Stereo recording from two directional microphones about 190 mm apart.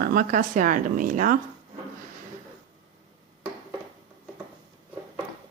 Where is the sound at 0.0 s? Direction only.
50° right (ahead or behind).